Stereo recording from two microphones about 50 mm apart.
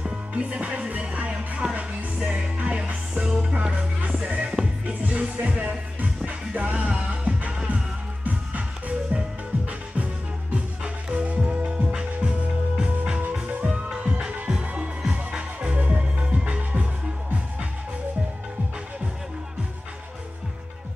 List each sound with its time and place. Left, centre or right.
0.0 s music: right
3.5 s music: right
10.5 s music: right
11.9 s music: centre